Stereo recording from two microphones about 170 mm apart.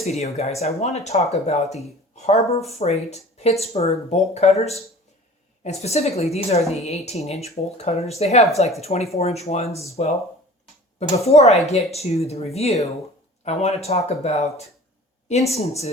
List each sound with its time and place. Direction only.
0.0 s speech: 40° left (ahead or behind)
11.3 s speech: 40° left (ahead or behind)